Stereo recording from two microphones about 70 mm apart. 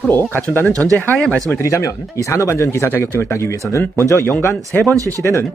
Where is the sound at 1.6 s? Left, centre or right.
Left.